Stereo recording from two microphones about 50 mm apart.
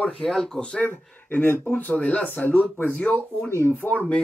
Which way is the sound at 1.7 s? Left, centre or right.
Left.